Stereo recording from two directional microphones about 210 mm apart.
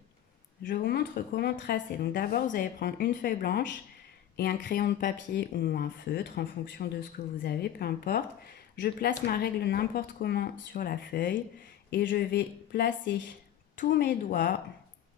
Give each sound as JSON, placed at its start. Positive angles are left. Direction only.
{"t": 0.6, "sound": "speech", "side_deg": 40}